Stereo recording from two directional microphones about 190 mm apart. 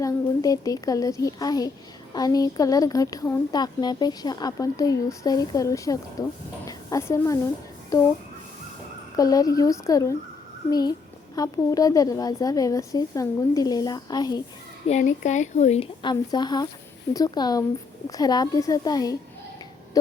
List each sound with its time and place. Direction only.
0.0 s a child's voice: 20° left (ahead or behind)
9.1 s a woman's voice: 20° left (ahead or behind)
14.8 s speech: 40° left (ahead or behind)
16.0 s a woman's voice: 20° left (ahead or behind)